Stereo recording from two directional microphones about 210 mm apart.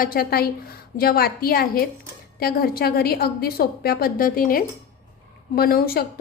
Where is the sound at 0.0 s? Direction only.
45° left (ahead or behind).